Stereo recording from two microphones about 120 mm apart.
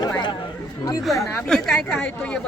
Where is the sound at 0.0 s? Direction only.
35° left (ahead or behind).